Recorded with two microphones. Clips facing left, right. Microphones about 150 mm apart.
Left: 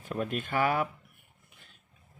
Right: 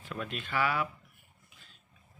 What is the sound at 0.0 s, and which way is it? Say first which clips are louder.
Speech: left 6 dB; 45° left (ahead or behind).